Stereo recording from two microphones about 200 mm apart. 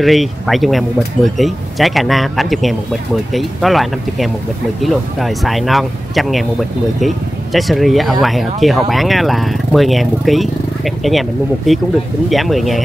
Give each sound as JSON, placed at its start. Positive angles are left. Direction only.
{"t": 0.0, "sound": "speech", "side_deg": 0}